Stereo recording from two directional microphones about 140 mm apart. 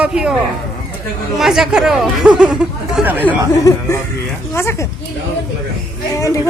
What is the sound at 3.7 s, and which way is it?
Speech, 25° left (ahead or behind).